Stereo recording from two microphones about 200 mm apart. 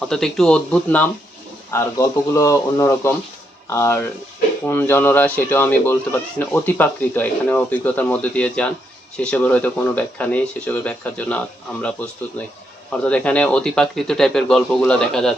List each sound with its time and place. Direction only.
0.0 s speech: 5° left (ahead or behind)